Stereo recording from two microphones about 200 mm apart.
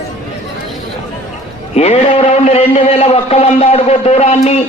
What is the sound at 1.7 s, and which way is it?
A man's voice, 30° left (ahead or behind).